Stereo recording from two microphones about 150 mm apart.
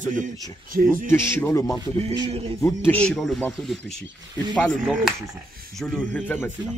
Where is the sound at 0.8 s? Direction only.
70° right (ahead or behind).